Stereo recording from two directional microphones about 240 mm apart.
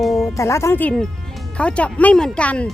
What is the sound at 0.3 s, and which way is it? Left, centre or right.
Speech, centre.